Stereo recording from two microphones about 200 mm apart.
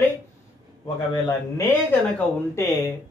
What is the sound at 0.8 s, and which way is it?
Speech, 20° left (ahead or behind).